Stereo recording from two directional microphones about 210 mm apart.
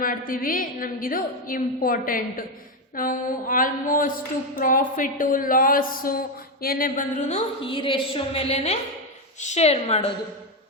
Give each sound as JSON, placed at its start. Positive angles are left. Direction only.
{"t": 0.0, "sound": "a woman's voice", "side_deg": 40}